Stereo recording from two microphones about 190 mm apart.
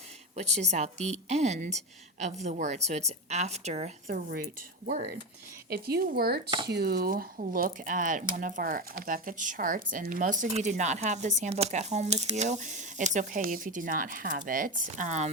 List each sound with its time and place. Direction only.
0.3 s a woman's voice: 35° right (ahead or behind)
5.6 s speech: 55° right (ahead or behind); by 15.3 s 40° right (ahead or behind)